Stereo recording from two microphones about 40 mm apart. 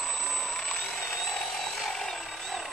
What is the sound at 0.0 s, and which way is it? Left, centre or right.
Vehicle, centre.